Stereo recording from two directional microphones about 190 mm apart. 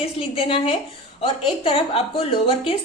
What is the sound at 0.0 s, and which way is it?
A woman's voice, 30° left (ahead or behind).